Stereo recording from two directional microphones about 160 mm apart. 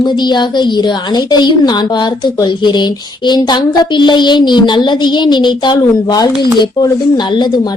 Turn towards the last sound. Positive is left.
turn(degrees=25)  # may be behind; listen again after turning